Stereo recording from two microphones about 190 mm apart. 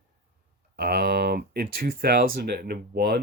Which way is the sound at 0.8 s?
55° right (ahead or behind).